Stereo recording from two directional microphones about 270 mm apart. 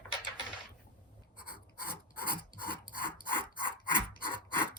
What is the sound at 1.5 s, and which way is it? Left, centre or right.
Filing, left.